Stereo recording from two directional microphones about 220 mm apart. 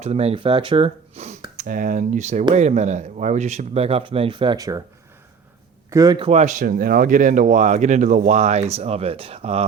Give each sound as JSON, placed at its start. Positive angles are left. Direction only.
{"t": 0.0, "sound": "speech", "side_deg": -30}
{"t": 5.9, "sound": "speech", "side_deg": -15}